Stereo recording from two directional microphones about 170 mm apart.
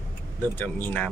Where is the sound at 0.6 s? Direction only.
10° left (ahead or behind).